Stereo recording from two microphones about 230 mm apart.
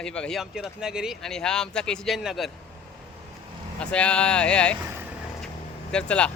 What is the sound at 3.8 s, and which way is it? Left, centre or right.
Speech, centre.